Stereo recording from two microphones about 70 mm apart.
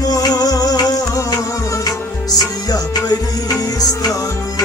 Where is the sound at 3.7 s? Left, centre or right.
Left.